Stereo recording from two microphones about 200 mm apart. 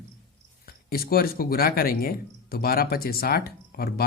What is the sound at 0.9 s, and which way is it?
Speech, 50° left (ahead or behind).